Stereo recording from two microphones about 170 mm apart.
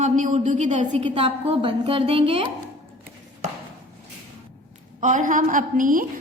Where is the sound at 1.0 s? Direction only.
30° right (ahead or behind).